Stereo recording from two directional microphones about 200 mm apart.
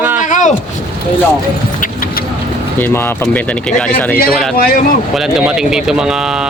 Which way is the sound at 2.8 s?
10° left (ahead or behind).